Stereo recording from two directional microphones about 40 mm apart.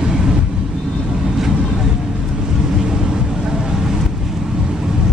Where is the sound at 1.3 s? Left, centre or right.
Centre.